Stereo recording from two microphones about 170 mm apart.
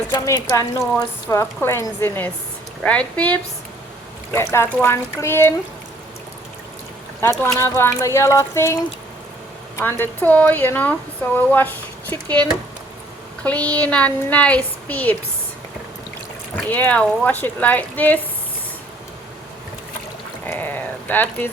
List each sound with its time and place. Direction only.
0.1 s a woman's voice: 20° left (ahead or behind)
4.4 s a woman's voice: 15° left (ahead or behind)
7.2 s a woman's voice: 20° left (ahead or behind)
16.6 s a woman's voice: 10° left (ahead or behind)
20.4 s a sound: 10° left (ahead or behind)